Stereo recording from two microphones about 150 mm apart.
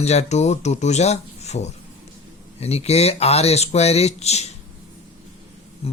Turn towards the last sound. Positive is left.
turn(degrees=40)  # may be behind; listen again after turning